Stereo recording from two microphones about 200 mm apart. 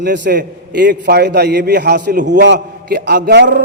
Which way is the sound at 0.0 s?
60° right (ahead or behind).